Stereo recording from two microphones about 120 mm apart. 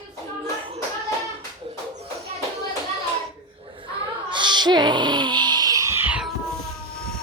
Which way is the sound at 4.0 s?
40° right (ahead or behind).